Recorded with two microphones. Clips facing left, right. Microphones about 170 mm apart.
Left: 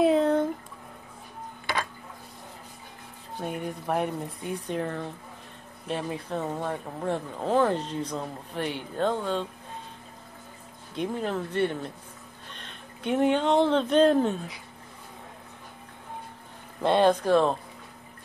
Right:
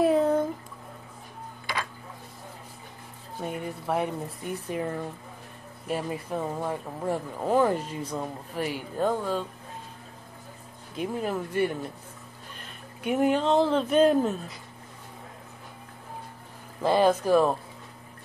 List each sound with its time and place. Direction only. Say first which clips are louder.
0.0 s a sound: left 1 dB; 5° right (ahead or behind)
3.3 s speech: left 1 dB; centre (ahead or behind)
11.0 s speech: even; 5° right (ahead or behind)
16.8 s speech: even; 5° right (ahead or behind)